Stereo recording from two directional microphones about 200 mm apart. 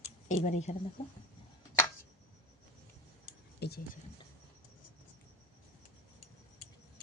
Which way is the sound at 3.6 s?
55° left (ahead or behind).